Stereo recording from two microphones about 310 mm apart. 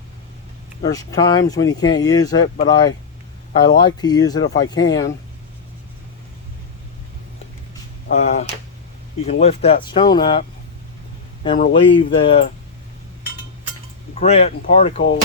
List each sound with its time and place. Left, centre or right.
0.9 s speech: centre
8.0 s speech: left
11.4 s speech: left
14.2 s speech: centre